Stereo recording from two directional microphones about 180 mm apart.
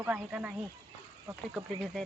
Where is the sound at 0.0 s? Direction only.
5° right (ahead or behind).